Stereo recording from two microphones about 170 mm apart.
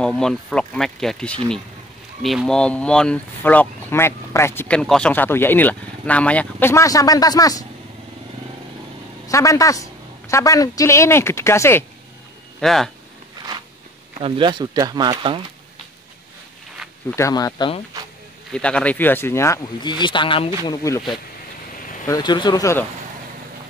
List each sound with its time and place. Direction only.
0.0 s speech: 5° left (ahead or behind); by 7.6 s 20° left (ahead or behind)
9.3 s a woman's voice: 20° left (ahead or behind)
12.5 s speech: centre (ahead or behind)
14.2 s speech: 30° right (ahead or behind)
17.1 s speech: 20° left (ahead or behind)
18.5 s speech: 5° left (ahead or behind)
22.0 s speech: 25° left (ahead or behind)